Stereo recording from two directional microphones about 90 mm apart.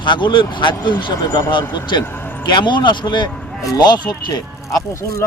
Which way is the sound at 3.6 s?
45° left (ahead or behind).